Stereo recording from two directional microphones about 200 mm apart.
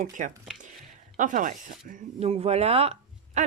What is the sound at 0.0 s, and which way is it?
A woman's voice, 40° right (ahead or behind).